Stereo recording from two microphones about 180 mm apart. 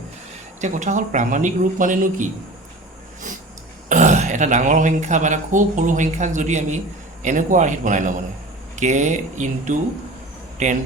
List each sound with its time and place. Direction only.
0.6 s speech: 40° right (ahead or behind)
3.8 s speech: 40° right (ahead or behind)